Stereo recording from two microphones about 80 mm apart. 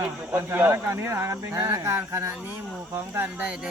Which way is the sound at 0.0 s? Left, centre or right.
Right.